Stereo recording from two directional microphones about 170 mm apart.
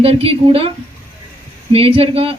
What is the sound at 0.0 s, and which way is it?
Speech, 35° right (ahead or behind).